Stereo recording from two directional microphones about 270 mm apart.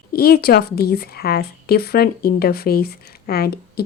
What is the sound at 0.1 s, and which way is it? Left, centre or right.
Speech, left.